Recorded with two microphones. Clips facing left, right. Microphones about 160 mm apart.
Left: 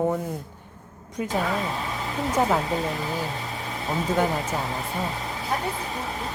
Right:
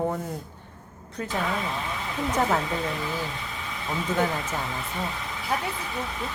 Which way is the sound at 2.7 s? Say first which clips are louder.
Left 2 dB; 35° left (ahead or behind).